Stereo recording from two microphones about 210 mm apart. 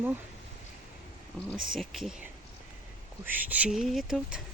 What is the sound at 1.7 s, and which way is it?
Speech, centre (ahead or behind).